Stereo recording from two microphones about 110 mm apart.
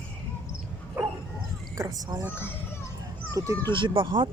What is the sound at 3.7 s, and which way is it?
Speech, 45° right (ahead or behind).